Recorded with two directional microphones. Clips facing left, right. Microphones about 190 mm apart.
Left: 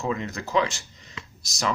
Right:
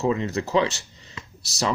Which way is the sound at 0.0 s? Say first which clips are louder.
Right 5 dB; 30° right (ahead or behind).